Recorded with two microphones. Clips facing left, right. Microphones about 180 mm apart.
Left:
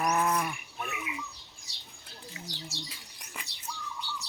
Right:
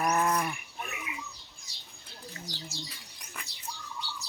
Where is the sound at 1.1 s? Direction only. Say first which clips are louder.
Left 2 dB; 45° right (ahead or behind).